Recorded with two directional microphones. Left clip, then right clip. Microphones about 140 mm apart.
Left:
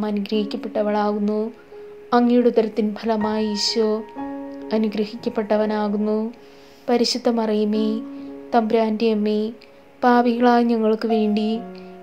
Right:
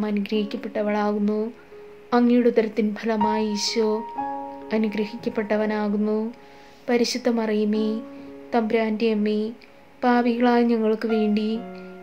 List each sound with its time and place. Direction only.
0.0 s a woman's voice: 10° left (ahead or behind)